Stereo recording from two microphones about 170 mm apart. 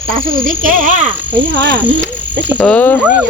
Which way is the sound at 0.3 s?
55° right (ahead or behind).